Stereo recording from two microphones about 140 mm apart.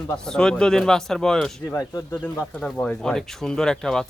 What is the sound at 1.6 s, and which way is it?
Speech, 20° left (ahead or behind).